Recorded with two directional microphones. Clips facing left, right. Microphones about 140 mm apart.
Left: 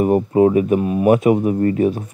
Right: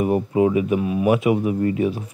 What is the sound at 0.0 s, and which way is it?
Speech, 45° left (ahead or behind).